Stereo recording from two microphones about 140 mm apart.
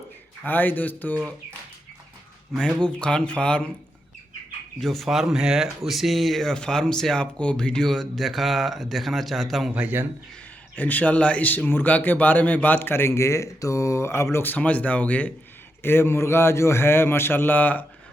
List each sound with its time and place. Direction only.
0.4 s a man's voice: 15° left (ahead or behind)
2.6 s a man's voice: 5° left (ahead or behind)
4.8 s speech: centre (ahead or behind)
10.8 s a man's voice: 10° left (ahead or behind)